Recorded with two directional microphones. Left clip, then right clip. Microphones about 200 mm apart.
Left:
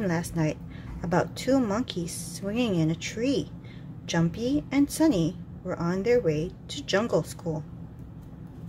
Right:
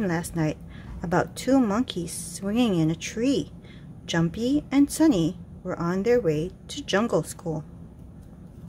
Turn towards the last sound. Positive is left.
turn(degrees=-20)  # may be behind; listen again after turning